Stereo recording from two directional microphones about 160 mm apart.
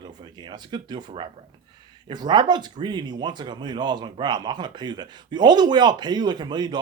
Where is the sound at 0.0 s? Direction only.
30° right (ahead or behind).